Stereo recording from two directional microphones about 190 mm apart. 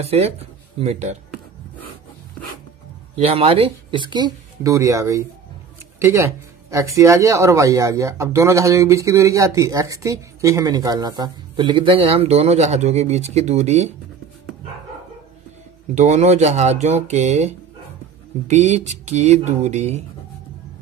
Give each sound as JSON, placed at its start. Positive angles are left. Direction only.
{"t": 0.0, "sound": "speech", "side_deg": -35}
{"t": 3.2, "sound": "speech", "side_deg": -30}
{"t": 15.9, "sound": "speech", "side_deg": -40}